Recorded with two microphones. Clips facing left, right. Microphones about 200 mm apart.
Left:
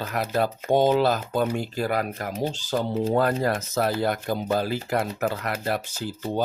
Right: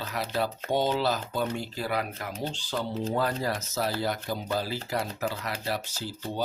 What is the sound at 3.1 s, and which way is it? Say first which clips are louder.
Speech: left 6 dB; 55° left (ahead or behind).